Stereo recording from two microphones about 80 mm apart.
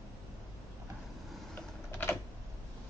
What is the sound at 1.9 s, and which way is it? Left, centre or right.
Typing, left.